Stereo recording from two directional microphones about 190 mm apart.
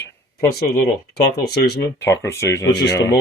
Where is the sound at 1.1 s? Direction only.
60° left (ahead or behind).